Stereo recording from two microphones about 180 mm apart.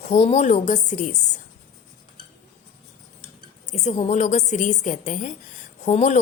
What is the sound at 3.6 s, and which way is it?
A woman's voice, 40° left (ahead or behind).